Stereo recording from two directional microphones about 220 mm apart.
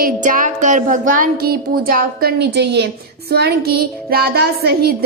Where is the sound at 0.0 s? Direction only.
35° right (ahead or behind).